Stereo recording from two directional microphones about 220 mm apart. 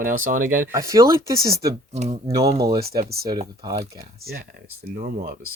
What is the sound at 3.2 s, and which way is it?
Speech, 20° right (ahead or behind).